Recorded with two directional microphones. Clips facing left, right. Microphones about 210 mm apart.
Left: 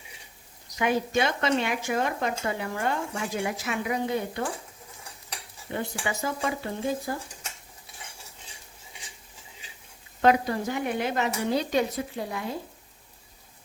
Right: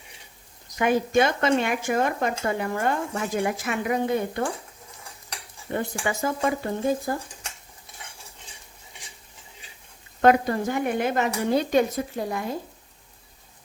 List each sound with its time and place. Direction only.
0.7 s speech: 50° right (ahead or behind)
5.7 s speech: 50° right (ahead or behind)
10.2 s speech: 50° right (ahead or behind)